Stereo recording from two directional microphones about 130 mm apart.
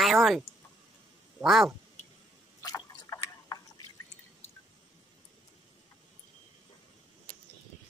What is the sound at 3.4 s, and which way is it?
Drip, 30° left (ahead or behind).